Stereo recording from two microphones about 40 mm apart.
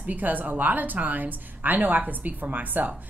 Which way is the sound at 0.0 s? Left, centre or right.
Right.